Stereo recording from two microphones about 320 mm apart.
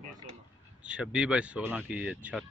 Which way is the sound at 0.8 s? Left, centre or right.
Centre.